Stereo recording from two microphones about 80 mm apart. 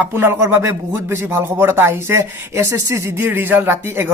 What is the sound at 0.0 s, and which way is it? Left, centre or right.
Speech, right.